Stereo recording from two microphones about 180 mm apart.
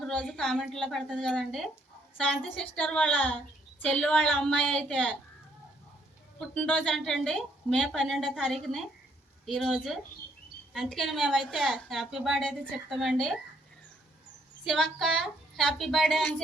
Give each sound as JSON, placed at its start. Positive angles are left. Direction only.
{"t": 0.0, "sound": "a woman's voice", "side_deg": 5}
{"t": 6.5, "sound": "a woman's voice", "side_deg": 5}
{"t": 14.6, "sound": "a woman's voice", "side_deg": 0}